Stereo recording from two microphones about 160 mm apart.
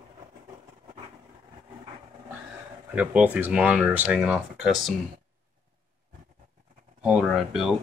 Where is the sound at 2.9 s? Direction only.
10° right (ahead or behind).